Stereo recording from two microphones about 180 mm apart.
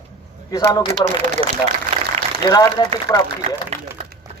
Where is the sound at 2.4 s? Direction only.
20° left (ahead or behind).